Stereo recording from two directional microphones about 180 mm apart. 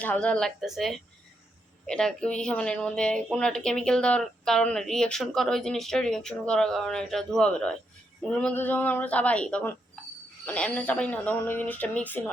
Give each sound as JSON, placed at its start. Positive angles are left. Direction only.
{"t": 0.0, "sound": "a woman's voice", "side_deg": 5}